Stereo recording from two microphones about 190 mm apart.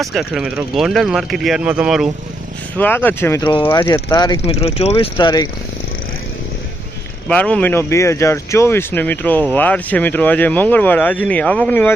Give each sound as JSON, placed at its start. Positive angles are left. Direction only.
{"t": 0.0, "sound": "speech", "side_deg": 0}
{"t": 2.7, "sound": "speech", "side_deg": 10}
{"t": 3.4, "sound": "speech", "side_deg": 25}
{"t": 4.4, "sound": "speech", "side_deg": 35}
{"t": 7.3, "sound": "speech", "side_deg": 5}